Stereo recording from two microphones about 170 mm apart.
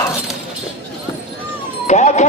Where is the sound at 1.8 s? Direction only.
45° left (ahead or behind).